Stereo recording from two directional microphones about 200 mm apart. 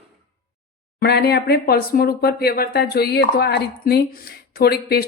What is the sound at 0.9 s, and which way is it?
A woman's voice, 50° left (ahead or behind).